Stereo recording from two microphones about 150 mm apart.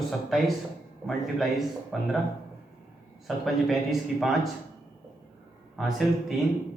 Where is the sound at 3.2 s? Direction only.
Centre (ahead or behind).